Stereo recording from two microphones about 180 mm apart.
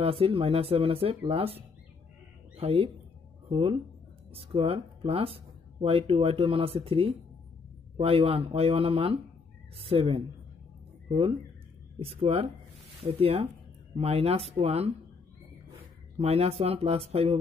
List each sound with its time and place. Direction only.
0.0 s speech: 30° right (ahead or behind)
16.2 s speech: 35° right (ahead or behind)